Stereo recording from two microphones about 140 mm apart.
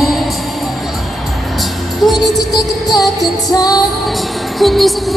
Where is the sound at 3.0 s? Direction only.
Centre (ahead or behind).